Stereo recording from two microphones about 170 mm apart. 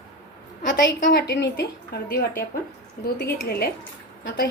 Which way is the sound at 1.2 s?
85° left.